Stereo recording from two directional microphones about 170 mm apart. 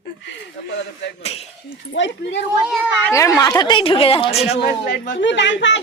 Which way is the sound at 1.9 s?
90° left.